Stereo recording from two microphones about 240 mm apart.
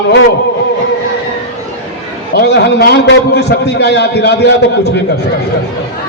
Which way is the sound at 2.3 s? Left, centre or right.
Left.